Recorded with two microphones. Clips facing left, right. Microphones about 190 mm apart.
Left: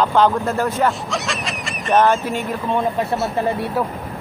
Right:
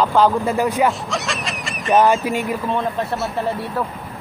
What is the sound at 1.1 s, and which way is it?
Goat, centre (ahead or behind).